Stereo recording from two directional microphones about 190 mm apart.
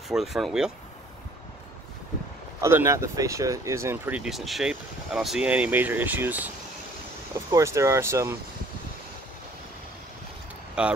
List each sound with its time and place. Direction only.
0.1 s speech: centre (ahead or behind)
2.6 s speech: 15° right (ahead or behind)
7.5 s speech: 15° right (ahead or behind)
10.8 s speech: 5° right (ahead or behind)